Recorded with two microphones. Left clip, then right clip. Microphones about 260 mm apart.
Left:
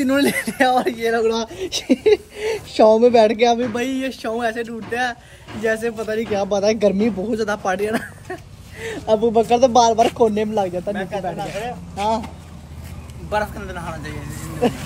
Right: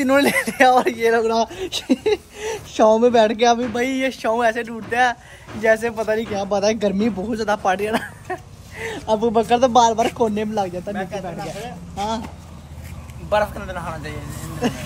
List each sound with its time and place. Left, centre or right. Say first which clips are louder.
0.0 s speech: right 2 dB; centre
13.3 s speech: right 3 dB; centre